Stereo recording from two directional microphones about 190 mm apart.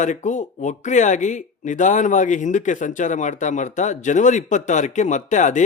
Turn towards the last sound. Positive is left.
turn(degrees=40)  # may be behind; listen again after turning